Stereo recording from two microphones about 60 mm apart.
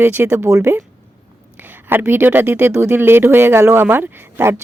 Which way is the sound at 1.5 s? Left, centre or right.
Right.